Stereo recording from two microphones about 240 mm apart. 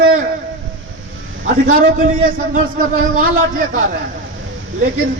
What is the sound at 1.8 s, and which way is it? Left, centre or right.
A man's voice, right.